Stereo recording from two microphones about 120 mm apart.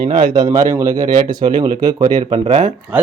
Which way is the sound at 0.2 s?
35° right (ahead or behind).